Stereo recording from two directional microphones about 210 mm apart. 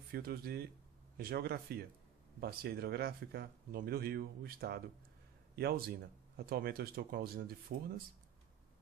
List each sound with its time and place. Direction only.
0.1 s speech: 45° right (ahead or behind)